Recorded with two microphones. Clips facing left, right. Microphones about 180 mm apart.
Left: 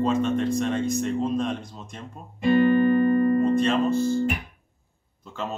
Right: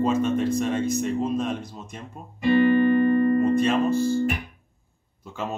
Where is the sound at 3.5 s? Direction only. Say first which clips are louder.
Even; 5° right (ahead or behind).